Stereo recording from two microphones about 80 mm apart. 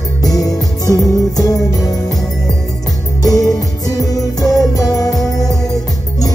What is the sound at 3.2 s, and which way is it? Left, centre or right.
Music, left.